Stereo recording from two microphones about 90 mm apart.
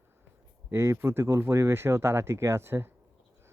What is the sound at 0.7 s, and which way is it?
Speech, 30° right (ahead or behind).